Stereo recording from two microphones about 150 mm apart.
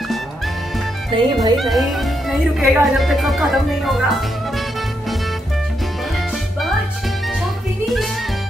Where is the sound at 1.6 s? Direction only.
Centre (ahead or behind).